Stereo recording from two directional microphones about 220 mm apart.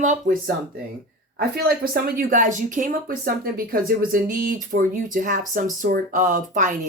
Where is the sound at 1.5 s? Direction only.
45° right (ahead or behind).